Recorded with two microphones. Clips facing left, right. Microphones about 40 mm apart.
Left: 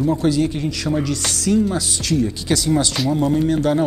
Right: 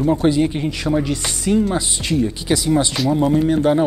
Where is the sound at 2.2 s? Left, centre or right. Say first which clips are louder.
Right 2 dB; centre.